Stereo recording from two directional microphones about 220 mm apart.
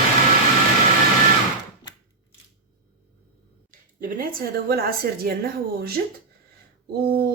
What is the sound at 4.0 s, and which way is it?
Speech, 40° right (ahead or behind).